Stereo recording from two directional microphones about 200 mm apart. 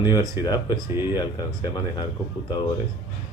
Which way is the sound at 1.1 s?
20° left (ahead or behind).